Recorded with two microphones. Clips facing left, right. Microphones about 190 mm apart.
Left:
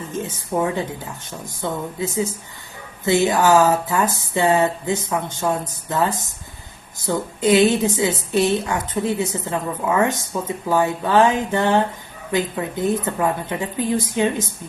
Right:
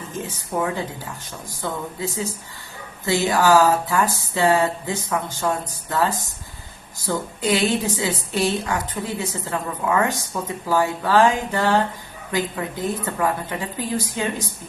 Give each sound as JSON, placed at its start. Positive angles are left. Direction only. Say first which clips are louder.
{"t": 0.1, "sound": "a woman's voice", "louder": "left 3 dB", "side_deg": 25}